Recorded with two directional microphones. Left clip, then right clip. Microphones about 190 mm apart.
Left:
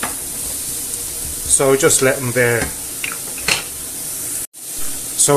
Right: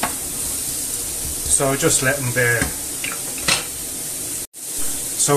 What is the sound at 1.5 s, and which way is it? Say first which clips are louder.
Speech: left 6 dB; 45° left (ahead or behind).